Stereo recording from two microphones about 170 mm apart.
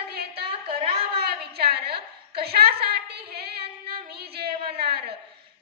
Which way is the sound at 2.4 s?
65° right (ahead or behind).